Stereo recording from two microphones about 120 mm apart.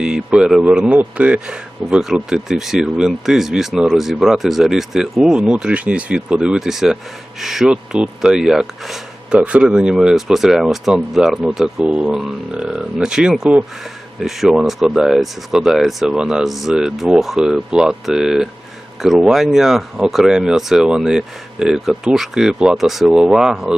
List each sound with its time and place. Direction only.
0.0 s speech: 5° right (ahead or behind)